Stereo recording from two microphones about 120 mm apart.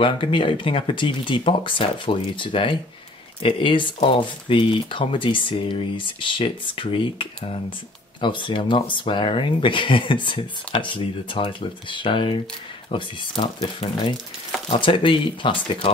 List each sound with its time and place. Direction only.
0.0 s speech: 45° left (ahead or behind)